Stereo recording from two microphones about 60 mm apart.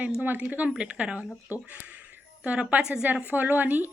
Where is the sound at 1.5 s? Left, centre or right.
Right.